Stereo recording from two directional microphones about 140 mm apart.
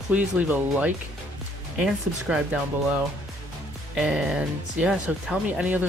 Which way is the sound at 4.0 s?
5° right (ahead or behind).